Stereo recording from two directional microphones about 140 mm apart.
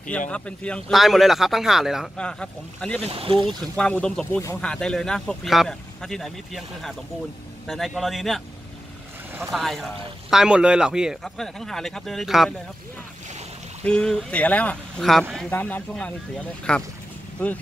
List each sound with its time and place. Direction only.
0.3 s speech: 10° left (ahead or behind)
3.0 s speech: 40° right (ahead or behind)
3.4 s speech: 5° left (ahead or behind)
9.5 s speech: centre (ahead or behind)
13.8 s speech: 5° left (ahead or behind)